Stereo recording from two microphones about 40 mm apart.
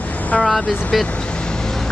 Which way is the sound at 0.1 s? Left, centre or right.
Left.